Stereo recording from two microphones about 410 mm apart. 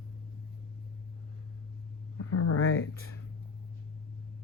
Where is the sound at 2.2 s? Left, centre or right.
Left.